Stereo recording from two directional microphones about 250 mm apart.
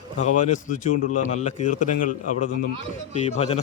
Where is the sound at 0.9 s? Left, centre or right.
Left.